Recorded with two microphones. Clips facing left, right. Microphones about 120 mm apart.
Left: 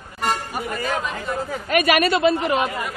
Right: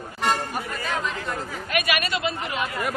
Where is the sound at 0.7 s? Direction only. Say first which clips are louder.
Left 3 dB; 45° left (ahead or behind).